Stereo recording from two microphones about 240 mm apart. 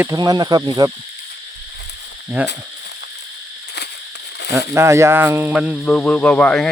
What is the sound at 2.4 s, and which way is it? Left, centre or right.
Speech, centre.